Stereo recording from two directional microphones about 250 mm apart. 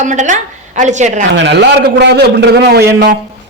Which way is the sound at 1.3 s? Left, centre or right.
Right.